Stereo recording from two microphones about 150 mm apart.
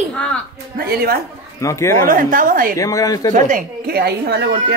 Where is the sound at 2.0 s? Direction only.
65° right (ahead or behind).